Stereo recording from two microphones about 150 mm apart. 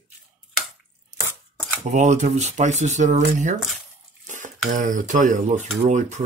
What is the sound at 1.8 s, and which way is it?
Speech, 50° right (ahead or behind).